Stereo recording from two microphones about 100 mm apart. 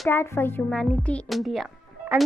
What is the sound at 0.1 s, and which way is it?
Speech, 25° left (ahead or behind).